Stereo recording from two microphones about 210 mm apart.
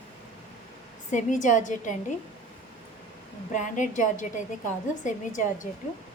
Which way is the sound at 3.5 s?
35° left (ahead or behind).